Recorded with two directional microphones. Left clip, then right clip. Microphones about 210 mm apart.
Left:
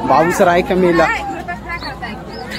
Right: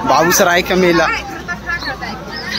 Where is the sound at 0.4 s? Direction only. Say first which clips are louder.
Even; 5° left (ahead or behind).